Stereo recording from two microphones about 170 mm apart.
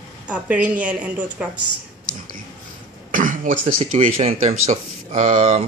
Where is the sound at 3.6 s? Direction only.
50° right (ahead or behind).